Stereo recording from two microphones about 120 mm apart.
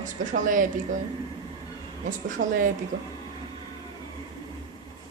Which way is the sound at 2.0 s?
90° right.